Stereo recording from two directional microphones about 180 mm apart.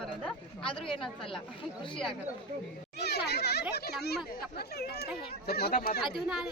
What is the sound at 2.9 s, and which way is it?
Speech, 65° left (ahead or behind).